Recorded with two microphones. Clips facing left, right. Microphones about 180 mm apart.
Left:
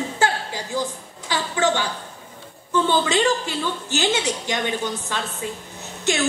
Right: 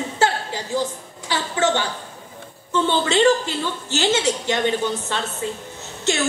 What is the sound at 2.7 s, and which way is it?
A woman's voice, 15° left (ahead or behind).